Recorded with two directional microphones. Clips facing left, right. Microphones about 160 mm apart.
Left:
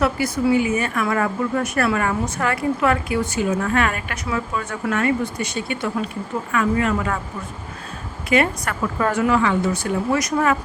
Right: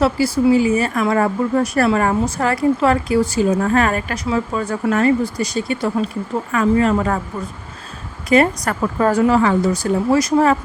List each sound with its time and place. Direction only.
0.0 s speech: 30° right (ahead or behind)
8.3 s speech: 35° right (ahead or behind)